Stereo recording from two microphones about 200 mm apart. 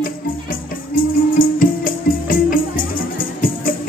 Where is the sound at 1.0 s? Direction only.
45° left (ahead or behind).